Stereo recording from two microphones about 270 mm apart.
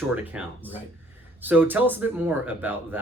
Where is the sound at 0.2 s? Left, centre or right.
Centre.